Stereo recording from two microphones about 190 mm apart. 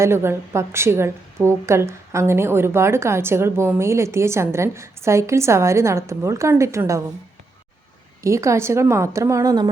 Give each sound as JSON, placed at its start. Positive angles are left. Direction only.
{"t": 0.0, "sound": "a woman's voice", "side_deg": -15}
{"t": 8.2, "sound": "a woman's voice", "side_deg": -15}